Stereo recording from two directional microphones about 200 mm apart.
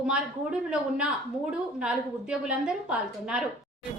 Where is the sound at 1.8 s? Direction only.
5° right (ahead or behind).